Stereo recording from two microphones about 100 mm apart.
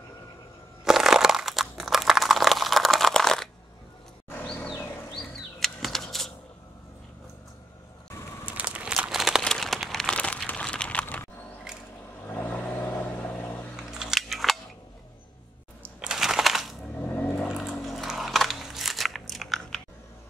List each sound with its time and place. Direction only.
0.8 s crunch: 5° right (ahead or behind)
5.1 s a sound: centre (ahead or behind)
8.5 s crumpling: 15° right (ahead or behind)
9.4 s a sound: 5° left (ahead or behind)
12.3 s vehicle: 20° left (ahead or behind)
13.7 s scissors: 5° right (ahead or behind)
15.8 s crushing: 10° right (ahead or behind)
16.9 s vehicle: 15° left (ahead or behind)
17.8 s biting: centre (ahead or behind)